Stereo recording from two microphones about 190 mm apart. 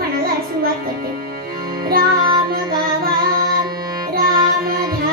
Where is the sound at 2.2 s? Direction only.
25° right (ahead or behind).